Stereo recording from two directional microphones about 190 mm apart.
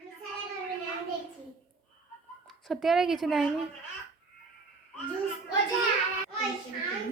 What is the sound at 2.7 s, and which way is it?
Speech, centre (ahead or behind).